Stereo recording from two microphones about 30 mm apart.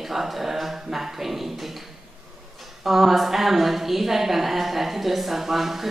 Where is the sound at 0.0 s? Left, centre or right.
Centre.